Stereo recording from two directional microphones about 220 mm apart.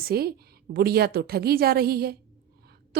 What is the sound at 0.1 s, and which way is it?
A woman's voice, 45° right (ahead or behind).